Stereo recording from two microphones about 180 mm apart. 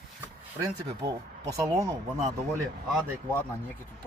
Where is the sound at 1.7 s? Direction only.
15° right (ahead or behind).